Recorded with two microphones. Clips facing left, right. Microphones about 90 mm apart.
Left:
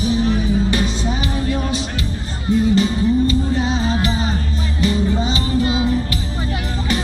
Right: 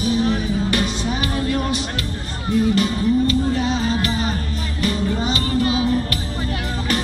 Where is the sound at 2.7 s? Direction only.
25° left (ahead or behind).